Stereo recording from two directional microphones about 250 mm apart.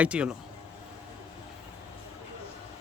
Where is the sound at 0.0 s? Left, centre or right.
Centre.